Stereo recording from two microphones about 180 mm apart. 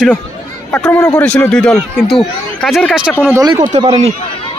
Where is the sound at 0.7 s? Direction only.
10° left (ahead or behind).